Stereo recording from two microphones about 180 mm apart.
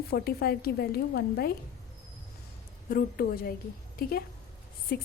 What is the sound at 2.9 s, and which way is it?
A woman's voice, 55° left (ahead or behind).